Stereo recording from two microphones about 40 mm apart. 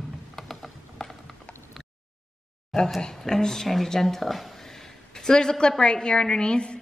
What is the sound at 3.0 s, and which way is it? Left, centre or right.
A woman's voice, centre.